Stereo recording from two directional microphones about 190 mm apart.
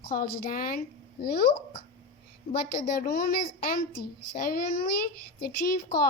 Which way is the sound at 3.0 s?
50° left (ahead or behind).